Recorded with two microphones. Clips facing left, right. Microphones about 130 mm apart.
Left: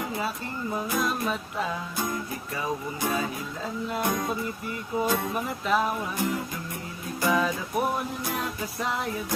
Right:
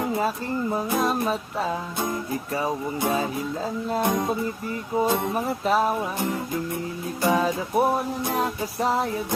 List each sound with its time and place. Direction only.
0.2 s music: 35° right (ahead or behind)
4.9 s speech: 25° right (ahead or behind)
5.3 s music: 35° right (ahead or behind)